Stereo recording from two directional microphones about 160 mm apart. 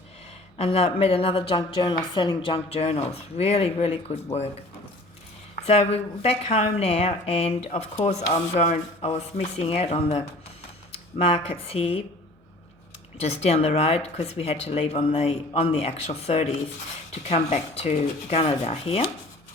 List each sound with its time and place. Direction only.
0.5 s a woman's voice: 40° left (ahead or behind)
5.6 s a woman's voice: 40° left (ahead or behind)
13.4 s a woman's voice: 40° left (ahead or behind)